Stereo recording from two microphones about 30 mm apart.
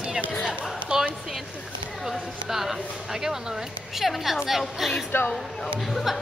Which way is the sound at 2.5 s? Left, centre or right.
Centre.